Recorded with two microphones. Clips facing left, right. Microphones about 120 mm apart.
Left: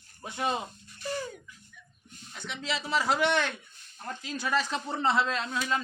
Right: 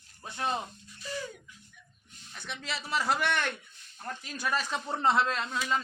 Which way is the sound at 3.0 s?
20° left (ahead or behind).